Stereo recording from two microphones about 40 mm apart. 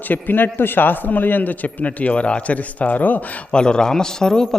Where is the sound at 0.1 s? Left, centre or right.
Left.